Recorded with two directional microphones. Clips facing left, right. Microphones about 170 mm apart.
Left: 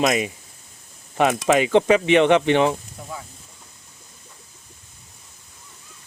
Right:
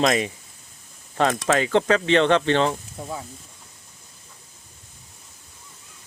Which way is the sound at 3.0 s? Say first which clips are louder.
Right 4 dB; 30° right (ahead or behind).